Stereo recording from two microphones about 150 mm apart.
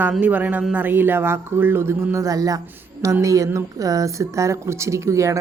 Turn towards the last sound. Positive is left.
turn(degrees=-20)  # may be behind; listen again after turning